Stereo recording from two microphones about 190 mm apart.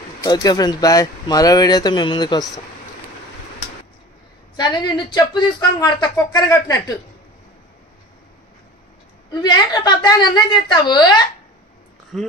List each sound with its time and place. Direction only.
0.2 s speech: 20° left (ahead or behind)
4.6 s speech: 20° left (ahead or behind)
9.3 s speech: 20° left (ahead or behind)
12.1 s speech: centre (ahead or behind)